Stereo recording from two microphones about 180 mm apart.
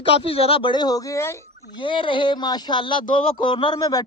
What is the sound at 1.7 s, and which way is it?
Speech, 25° left (ahead or behind).